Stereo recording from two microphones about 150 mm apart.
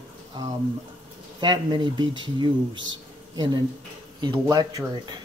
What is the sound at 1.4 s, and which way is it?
Speech, 30° right (ahead or behind).